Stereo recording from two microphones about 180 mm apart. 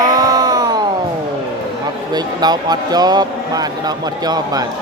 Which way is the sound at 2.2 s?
20° right (ahead or behind).